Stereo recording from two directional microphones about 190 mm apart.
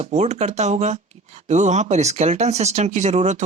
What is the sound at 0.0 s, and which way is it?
Speech, 35° right (ahead or behind).